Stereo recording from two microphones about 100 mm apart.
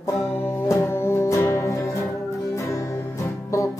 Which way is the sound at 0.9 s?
30° left (ahead or behind).